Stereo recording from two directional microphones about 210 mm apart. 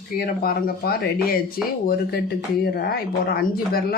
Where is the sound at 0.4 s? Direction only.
45° left (ahead or behind).